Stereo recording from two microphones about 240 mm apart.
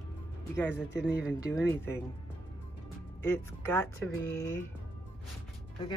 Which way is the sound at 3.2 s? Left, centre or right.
Centre.